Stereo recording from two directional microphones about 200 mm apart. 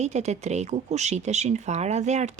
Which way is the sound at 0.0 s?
35° right (ahead or behind).